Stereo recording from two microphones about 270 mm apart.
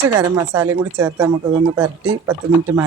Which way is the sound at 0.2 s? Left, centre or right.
Centre.